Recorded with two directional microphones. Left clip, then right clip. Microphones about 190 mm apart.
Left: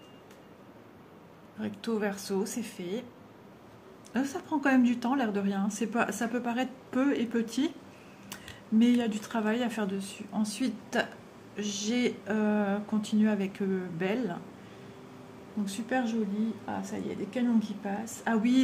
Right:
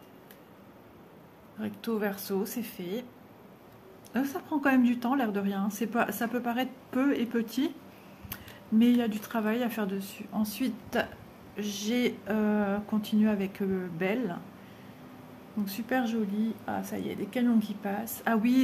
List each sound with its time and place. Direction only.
1.6 s speech: 10° right (ahead or behind)
4.1 s speech: 10° right (ahead or behind)
15.6 s speech: 10° right (ahead or behind)
16.6 s speech: 20° right (ahead or behind)